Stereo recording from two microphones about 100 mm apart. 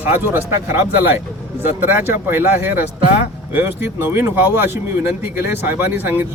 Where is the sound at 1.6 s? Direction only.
20° right (ahead or behind).